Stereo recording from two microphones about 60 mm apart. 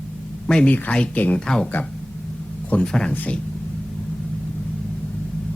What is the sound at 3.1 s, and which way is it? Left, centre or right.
Speech, left.